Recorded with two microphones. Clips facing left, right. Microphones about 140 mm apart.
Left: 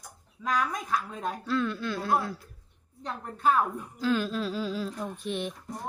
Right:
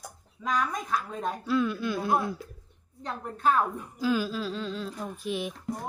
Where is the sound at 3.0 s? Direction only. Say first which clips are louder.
Even; centre (ahead or behind).